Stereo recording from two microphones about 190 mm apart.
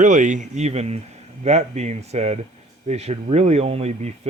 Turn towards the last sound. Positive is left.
turn(degrees=-35)  # may be behind; listen again after turning